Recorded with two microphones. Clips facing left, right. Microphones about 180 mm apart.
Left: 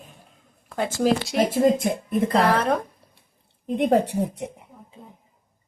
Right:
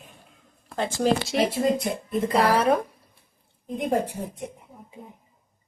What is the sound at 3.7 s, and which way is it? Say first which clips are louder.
Speech: left 5 dB; 70° left (ahead or behind).